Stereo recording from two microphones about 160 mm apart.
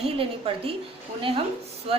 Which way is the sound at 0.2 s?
35° right (ahead or behind).